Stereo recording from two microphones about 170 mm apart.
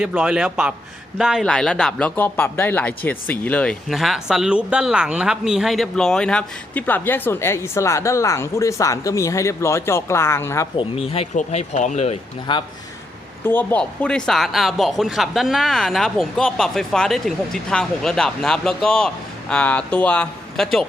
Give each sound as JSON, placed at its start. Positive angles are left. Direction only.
{"t": 0.0, "sound": "speech", "side_deg": -5}
{"t": 10.8, "sound": "speech", "side_deg": 35}
{"t": 13.4, "sound": "speech", "side_deg": 10}